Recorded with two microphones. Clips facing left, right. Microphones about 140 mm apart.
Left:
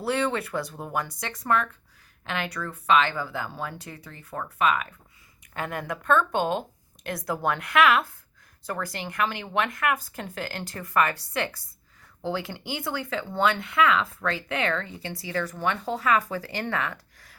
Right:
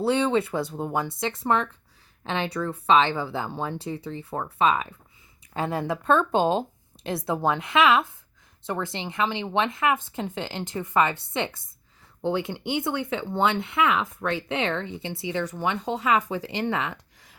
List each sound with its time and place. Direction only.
0.0 s speech: 25° right (ahead or behind)